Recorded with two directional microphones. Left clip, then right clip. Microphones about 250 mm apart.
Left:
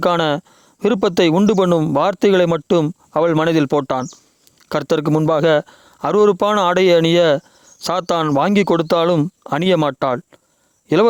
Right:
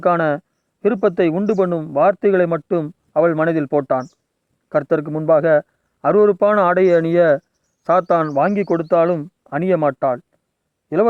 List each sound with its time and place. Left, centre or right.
0.0 s speech: left